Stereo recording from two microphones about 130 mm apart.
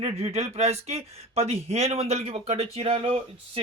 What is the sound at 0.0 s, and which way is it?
Speech, 50° right (ahead or behind).